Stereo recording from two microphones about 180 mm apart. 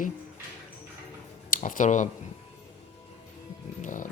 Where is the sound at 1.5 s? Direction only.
45° left (ahead or behind).